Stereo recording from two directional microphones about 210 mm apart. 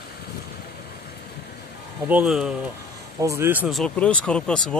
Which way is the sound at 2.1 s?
5° right (ahead or behind).